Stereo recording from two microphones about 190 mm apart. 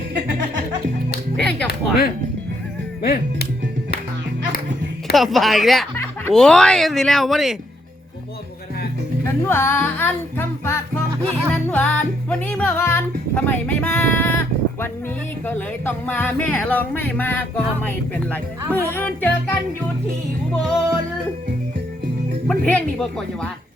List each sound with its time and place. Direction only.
1.4 s music: 5° left (ahead or behind)
1.6 s music: 50° left (ahead or behind)
3.0 s speech: 55° left (ahead or behind)
5.1 s speech: centre (ahead or behind)
9.2 s speech: 10° left (ahead or behind)
11.5 s music: 10° left (ahead or behind)
15.4 s speech: 10° left (ahead or behind)
22.4 s speech: 5° left (ahead or behind)